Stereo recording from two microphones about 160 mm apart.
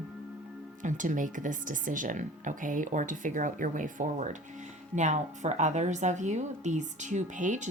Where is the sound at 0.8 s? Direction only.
55° right (ahead or behind).